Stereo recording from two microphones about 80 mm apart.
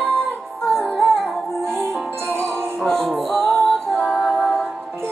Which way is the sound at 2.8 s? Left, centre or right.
Centre.